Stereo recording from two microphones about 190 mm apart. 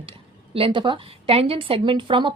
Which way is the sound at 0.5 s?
25° right (ahead or behind).